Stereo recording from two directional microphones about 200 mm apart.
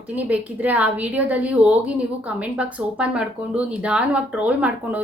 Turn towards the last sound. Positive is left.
turn(degrees=-5)  # may be behind; listen again after turning